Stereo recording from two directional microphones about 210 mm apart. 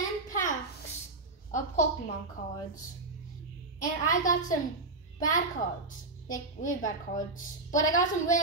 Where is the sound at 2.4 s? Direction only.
45° left (ahead or behind).